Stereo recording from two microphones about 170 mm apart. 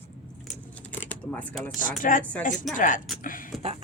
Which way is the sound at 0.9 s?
10° left (ahead or behind).